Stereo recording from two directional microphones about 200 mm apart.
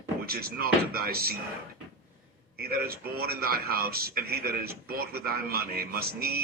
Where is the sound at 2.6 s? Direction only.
50° right (ahead or behind).